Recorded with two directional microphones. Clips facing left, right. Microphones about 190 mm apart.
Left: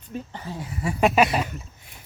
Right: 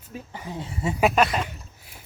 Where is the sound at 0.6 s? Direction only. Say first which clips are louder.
Right 1 dB; 25° right (ahead or behind).